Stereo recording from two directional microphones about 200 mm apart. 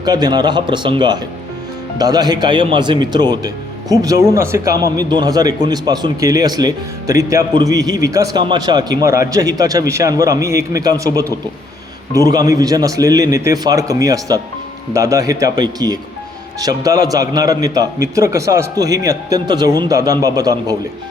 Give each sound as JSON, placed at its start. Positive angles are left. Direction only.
{"t": 0.0, "sound": "speech", "side_deg": -20}